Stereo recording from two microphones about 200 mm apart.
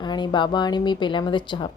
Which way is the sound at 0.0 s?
20° left (ahead or behind).